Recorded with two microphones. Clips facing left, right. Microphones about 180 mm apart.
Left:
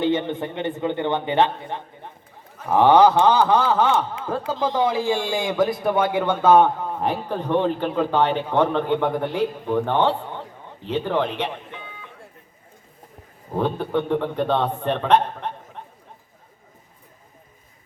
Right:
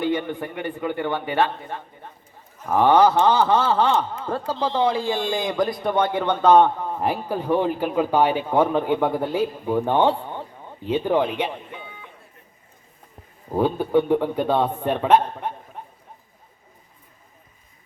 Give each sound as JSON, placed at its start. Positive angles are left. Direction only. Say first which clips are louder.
{"t": 0.0, "sound": "a man's voice", "louder": "left 2 dB", "side_deg": 20}
{"t": 3.6, "sound": "a man's voice", "louder": "even", "side_deg": 0}
{"t": 4.5, "sound": "a man's voice", "louder": "even", "side_deg": 15}
{"t": 13.6, "sound": "a man's voice", "louder": "right 3 dB", "side_deg": -10}